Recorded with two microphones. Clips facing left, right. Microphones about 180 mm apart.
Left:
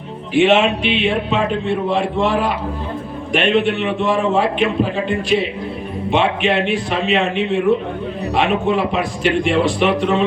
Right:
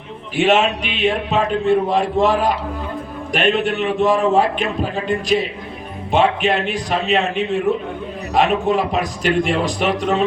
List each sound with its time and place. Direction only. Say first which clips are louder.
0.3 s a man's voice: left 3 dB; 40° right (ahead or behind)